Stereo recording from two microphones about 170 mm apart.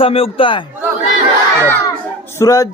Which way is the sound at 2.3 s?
20° left (ahead or behind).